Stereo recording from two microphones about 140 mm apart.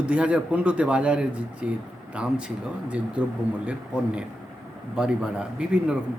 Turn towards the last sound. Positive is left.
turn(degrees=-5)  # may be behind; listen again after turning